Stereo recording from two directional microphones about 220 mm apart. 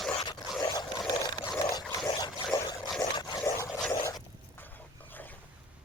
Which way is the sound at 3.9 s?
15° left (ahead or behind).